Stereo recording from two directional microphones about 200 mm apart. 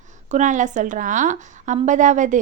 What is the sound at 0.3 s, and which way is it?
A woman's voice, 40° right (ahead or behind).